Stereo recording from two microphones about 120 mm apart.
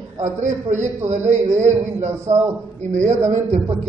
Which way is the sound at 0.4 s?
90° right.